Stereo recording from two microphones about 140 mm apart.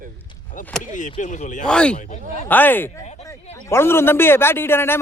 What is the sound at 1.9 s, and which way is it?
Speech, 60° left (ahead or behind).